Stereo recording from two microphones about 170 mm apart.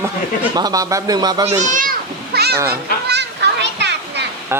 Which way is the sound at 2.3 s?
70° right (ahead or behind).